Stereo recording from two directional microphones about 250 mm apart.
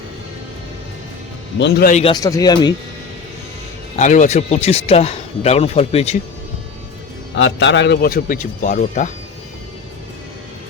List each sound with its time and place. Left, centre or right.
1.5 s a man's voice: left
1.9 s speech: left
3.9 s speech: left
7.3 s a man's voice: left